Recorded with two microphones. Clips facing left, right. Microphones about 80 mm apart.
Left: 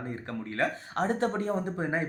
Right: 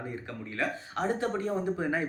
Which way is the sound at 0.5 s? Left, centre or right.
Left.